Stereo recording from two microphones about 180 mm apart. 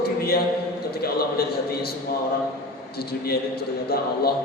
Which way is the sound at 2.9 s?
60° left (ahead or behind).